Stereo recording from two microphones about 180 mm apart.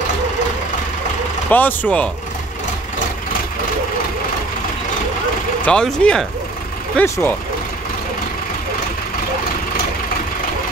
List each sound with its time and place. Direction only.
1.5 s speech: 10° left (ahead or behind)
5.6 s speech: 5° left (ahead or behind)